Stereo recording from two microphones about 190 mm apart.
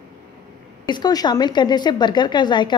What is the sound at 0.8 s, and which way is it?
A woman's voice, 20° left (ahead or behind).